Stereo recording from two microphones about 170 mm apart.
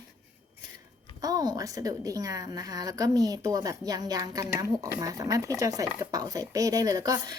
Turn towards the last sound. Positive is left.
turn(degrees=-20)  # may be behind; listen again after turning